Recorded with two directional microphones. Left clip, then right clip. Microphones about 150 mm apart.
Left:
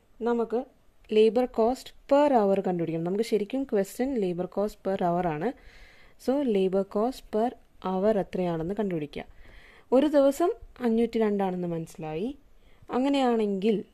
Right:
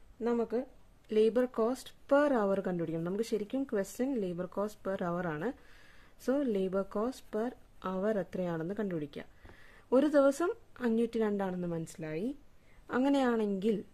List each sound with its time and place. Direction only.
0.4 s speech: 15° left (ahead or behind)
1.0 s a woman's voice: 30° left (ahead or behind)